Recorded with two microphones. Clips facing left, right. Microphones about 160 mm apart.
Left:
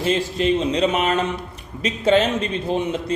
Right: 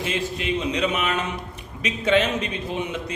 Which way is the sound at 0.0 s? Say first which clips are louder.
Left 6 dB; 35° left (ahead or behind).